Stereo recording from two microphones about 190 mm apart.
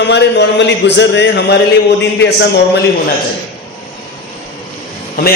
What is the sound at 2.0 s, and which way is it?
Mantra, 65° left (ahead or behind).